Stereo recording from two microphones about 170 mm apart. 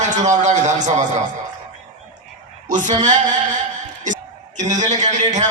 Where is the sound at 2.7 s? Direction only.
45° right (ahead or behind).